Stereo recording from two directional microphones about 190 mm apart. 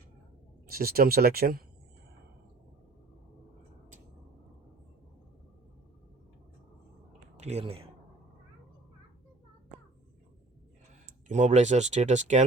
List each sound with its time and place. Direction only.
0.7 s speech: 50° right (ahead or behind)
7.3 s speech: 35° right (ahead or behind)
11.0 s speech: 40° right (ahead or behind)